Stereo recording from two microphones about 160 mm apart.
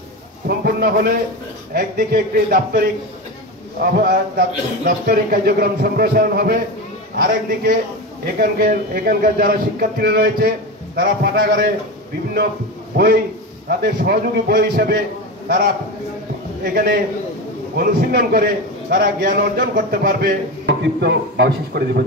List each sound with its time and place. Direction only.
0.5 s a sound: 75° right (ahead or behind)
1.7 s a man's voice: 70° right (ahead or behind)
12.9 s a man's voice: 70° right (ahead or behind)
16.7 s a man's voice: 70° right (ahead or behind); by 22.0 s 90° right